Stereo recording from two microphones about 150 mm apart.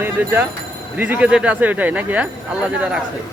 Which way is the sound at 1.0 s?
10° right (ahead or behind).